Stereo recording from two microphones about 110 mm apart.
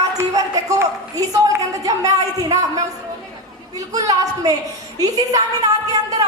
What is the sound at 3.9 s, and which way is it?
A woman's voice, 30° right (ahead or behind).